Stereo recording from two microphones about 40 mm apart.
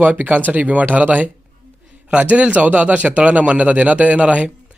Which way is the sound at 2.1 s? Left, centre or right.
Right.